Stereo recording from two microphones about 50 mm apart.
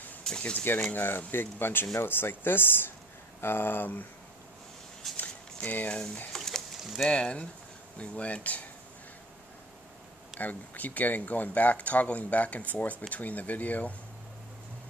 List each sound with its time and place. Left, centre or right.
0.4 s speech: left
0.9 s speech: left
5.1 s a sound: left
6.3 s a sound: centre
6.8 s speech: centre
7.1 s speech: left
10.4 s speech: left